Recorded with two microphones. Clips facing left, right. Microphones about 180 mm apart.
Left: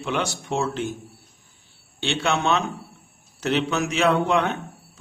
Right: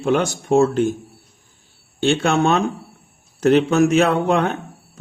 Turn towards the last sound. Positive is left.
turn(degrees=-50)  # may be behind; listen again after turning